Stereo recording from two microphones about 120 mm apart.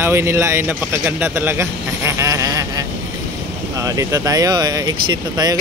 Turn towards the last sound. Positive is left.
turn(degrees=-35)  # may be behind; listen again after turning